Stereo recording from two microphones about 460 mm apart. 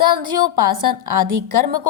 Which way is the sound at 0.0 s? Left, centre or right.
Right.